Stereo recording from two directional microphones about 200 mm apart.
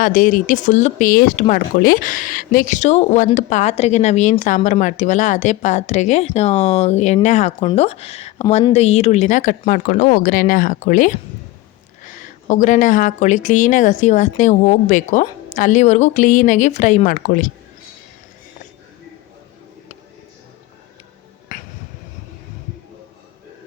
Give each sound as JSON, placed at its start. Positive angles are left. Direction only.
{"t": 0.0, "sound": "speech", "side_deg": 40}
{"t": 21.5, "sound": "finger snapping", "side_deg": 40}